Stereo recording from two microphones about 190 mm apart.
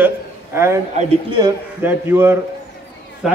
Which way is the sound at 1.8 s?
10° right (ahead or behind).